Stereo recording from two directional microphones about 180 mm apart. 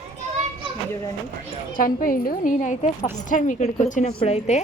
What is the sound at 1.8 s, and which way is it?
A woman's voice, 50° left (ahead or behind).